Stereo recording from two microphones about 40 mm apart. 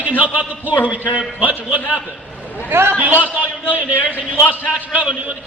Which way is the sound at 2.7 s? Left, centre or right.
Right.